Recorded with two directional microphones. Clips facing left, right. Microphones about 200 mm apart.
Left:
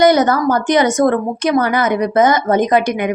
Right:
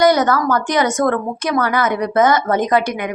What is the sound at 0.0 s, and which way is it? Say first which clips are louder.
Speech: left 2 dB; 20° left (ahead or behind).